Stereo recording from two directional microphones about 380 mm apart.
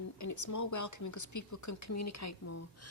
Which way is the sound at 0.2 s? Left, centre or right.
Left.